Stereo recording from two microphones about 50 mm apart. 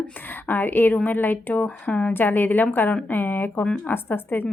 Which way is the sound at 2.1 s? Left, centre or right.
Left.